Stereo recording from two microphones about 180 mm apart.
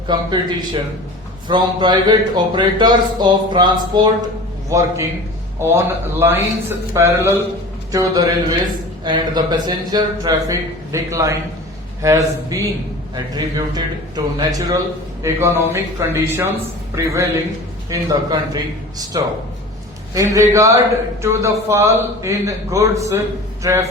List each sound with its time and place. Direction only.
0.1 s a man's voice: 25° right (ahead or behind)